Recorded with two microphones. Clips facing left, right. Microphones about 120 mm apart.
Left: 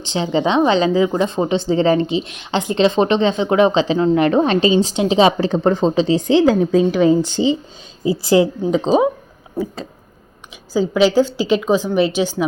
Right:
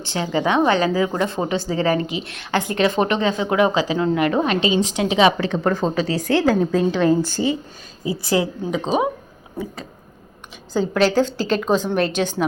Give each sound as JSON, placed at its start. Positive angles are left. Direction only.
{"t": 0.0, "sound": "a woman's voice", "side_deg": 20}
{"t": 10.8, "sound": "a woman's voice", "side_deg": 10}